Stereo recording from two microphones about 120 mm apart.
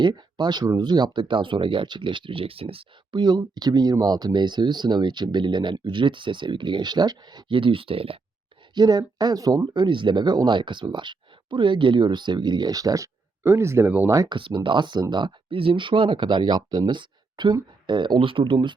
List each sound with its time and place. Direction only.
0.0 s speech: 40° right (ahead or behind)
8.7 s speech: 35° right (ahead or behind); by 14.1 s 15° right (ahead or behind)
14.1 s speech: 30° right (ahead or behind)
14.3 s speech: 45° right (ahead or behind)